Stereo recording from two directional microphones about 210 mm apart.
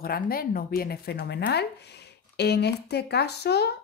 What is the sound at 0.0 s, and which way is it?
A woman's voice, 45° left (ahead or behind).